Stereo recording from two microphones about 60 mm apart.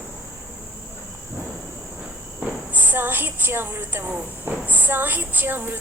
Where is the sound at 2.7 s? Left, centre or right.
Right.